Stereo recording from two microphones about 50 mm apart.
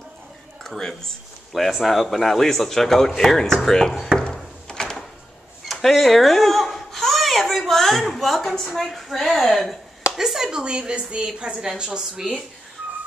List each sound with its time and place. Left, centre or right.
0.7 s speech: centre
1.5 s a man's voice: centre
4.6 s door: centre
5.7 s babbling: centre
8.1 s a woman's voice: centre
10.1 s speech: centre